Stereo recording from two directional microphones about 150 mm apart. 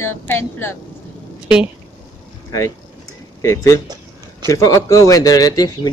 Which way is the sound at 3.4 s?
20° left (ahead or behind).